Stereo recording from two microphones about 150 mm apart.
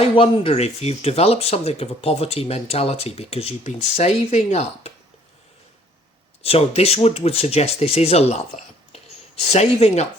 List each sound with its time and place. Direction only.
0.0 s speech: 40° left (ahead or behind)
6.4 s speech: 40° left (ahead or behind)